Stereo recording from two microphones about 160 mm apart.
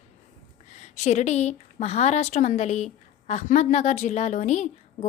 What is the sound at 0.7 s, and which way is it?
A woman's voice, 45° left (ahead or behind).